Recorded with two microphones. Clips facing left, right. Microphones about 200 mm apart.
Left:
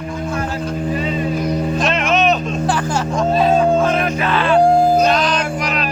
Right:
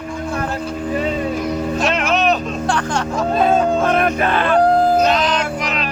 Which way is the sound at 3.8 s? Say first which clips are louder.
Right 1 dB; 55° right (ahead or behind).